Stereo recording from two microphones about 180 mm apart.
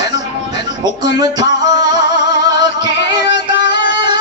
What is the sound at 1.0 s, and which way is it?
Music, 20° right (ahead or behind).